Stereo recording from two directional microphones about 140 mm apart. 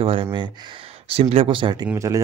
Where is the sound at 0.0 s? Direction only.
40° right (ahead or behind).